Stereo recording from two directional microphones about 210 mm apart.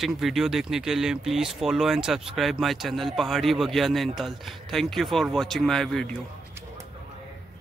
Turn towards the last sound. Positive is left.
turn(degrees=5)  # may be behind; listen again after turning